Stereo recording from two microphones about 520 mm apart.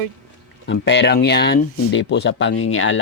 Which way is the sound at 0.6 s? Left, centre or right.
Centre.